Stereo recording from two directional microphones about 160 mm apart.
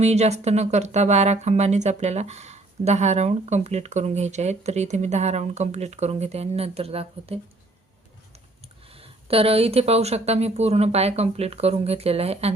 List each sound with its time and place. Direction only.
0.0 s speech: 45° right (ahead or behind)
9.0 s speech: 35° right (ahead or behind)